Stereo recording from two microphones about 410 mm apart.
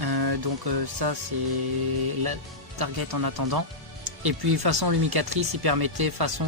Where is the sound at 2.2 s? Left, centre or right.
Right.